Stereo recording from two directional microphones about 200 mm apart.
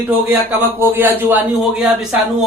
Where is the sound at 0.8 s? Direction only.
10° right (ahead or behind).